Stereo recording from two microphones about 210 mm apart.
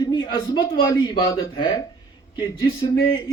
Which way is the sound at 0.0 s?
20° left (ahead or behind).